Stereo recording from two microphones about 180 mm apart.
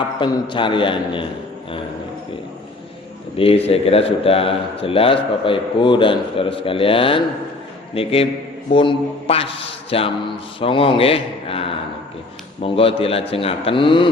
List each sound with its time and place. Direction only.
0.2 s a man's voice: 25° left (ahead or behind)
3.3 s a man's voice: 30° left (ahead or behind)